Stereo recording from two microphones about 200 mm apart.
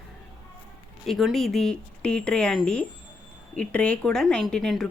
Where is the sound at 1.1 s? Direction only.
Centre (ahead or behind).